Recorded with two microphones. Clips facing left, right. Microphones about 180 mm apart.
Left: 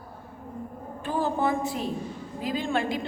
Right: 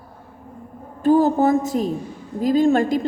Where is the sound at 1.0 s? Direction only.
40° right (ahead or behind).